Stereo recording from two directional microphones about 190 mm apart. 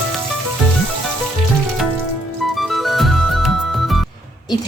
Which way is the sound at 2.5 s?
Centre (ahead or behind).